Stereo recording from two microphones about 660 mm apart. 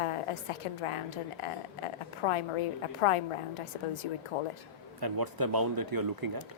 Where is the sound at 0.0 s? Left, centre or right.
Left.